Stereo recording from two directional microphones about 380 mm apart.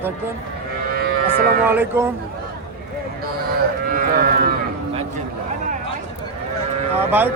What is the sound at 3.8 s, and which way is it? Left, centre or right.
Livestock, right.